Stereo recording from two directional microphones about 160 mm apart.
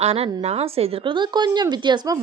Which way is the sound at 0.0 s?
40° right (ahead or behind).